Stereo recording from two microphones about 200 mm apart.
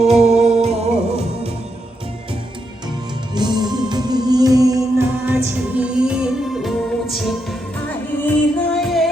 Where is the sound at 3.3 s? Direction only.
20° right (ahead or behind).